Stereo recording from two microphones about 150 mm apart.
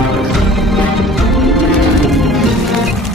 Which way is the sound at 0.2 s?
Centre (ahead or behind).